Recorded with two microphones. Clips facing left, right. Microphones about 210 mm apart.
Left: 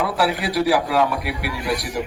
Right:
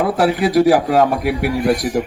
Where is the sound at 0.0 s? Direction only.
45° right (ahead or behind).